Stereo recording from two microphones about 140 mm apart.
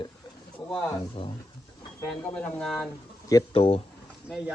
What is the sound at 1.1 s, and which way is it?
Speech, 40° left (ahead or behind).